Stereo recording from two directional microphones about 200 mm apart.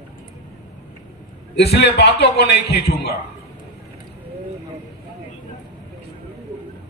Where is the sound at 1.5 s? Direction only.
55° left (ahead or behind).